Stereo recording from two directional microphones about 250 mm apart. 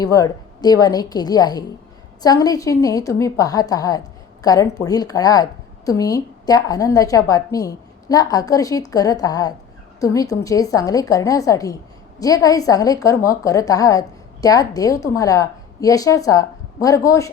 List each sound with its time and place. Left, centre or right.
0.0 s a woman's voice: centre